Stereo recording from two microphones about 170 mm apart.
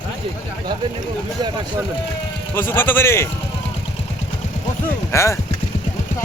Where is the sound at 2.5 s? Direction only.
15° left (ahead or behind).